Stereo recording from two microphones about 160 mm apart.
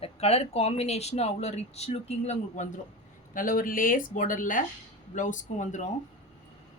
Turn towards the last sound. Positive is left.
turn(degrees=50)  # may be behind; listen again after turning